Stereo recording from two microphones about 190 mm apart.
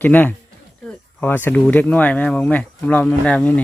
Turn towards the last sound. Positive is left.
turn(degrees=5)  # may be behind; listen again after turning